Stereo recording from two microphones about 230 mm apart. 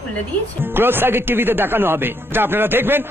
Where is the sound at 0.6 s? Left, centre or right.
Centre.